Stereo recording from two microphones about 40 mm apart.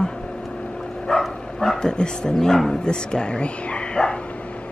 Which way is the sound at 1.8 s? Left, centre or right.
Centre.